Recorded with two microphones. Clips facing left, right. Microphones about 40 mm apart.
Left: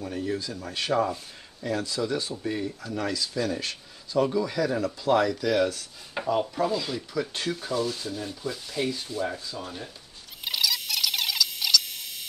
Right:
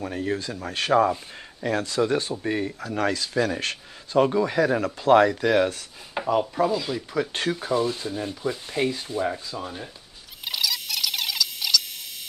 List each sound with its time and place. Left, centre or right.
0.0 s speech: right
6.2 s wood: centre
6.7 s speech: centre
7.2 s speech: right
9.6 s speech: centre
10.4 s a sound: centre